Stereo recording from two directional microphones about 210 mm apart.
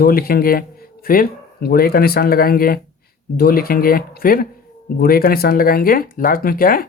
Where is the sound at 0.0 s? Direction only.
45° left (ahead or behind).